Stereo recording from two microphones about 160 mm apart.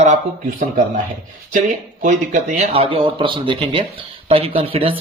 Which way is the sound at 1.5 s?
50° right (ahead or behind).